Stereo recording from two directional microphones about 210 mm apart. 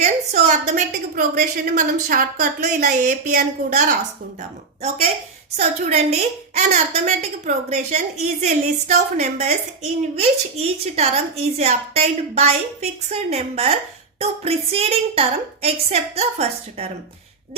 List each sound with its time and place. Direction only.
0.0 s a woman's voice: 35° right (ahead or behind)
5.5 s a woman's voice: 30° right (ahead or behind)